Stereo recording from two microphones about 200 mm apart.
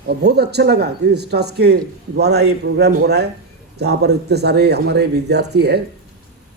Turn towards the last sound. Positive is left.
turn(degrees=-55)  # may be behind; listen again after turning